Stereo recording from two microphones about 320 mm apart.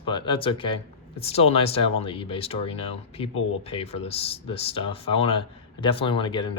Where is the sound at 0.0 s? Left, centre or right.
Centre.